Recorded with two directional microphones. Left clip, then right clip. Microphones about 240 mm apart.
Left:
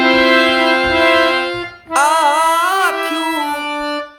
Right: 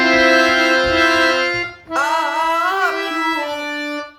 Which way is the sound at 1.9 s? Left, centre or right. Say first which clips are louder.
Left 6 dB; left.